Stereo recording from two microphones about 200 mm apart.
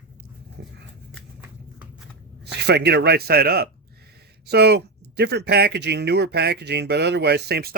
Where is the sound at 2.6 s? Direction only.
55° right (ahead or behind).